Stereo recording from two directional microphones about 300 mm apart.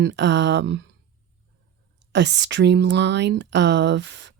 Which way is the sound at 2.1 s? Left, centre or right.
Right.